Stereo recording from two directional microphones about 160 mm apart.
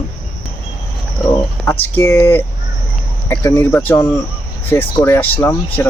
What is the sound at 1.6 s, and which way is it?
Speech, 10° left (ahead or behind).